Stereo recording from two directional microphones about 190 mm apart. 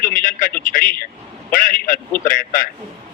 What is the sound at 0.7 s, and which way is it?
A man's voice, 50° left (ahead or behind).